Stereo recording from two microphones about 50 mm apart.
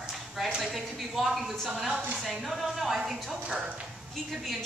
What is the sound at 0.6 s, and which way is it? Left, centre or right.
A woman's voice, centre.